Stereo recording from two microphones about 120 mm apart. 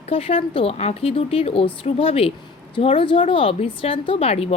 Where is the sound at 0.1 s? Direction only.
55° left (ahead or behind).